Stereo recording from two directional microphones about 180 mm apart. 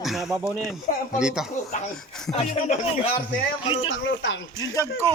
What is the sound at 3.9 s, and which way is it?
Speech, 90° left.